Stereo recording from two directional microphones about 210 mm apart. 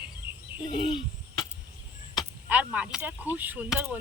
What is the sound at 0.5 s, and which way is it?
Bird, 20° left (ahead or behind).